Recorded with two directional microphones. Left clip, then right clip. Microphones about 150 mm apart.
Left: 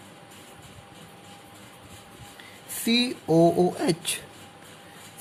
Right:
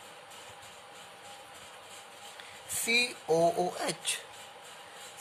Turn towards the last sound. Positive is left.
turn(degrees=20)  # may be behind; listen again after turning